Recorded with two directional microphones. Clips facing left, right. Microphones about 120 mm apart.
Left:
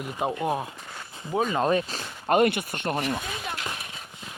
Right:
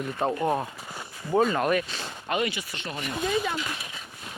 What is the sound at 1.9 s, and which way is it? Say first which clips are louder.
Speech: left 6 dB; 45° left (ahead or behind).